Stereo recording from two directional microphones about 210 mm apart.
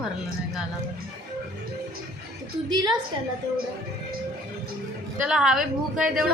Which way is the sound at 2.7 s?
20° right (ahead or behind).